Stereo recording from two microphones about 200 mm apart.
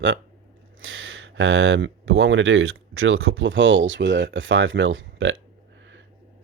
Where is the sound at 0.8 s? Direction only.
85° right.